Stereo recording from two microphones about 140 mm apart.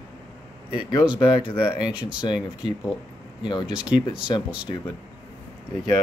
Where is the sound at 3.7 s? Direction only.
10° right (ahead or behind).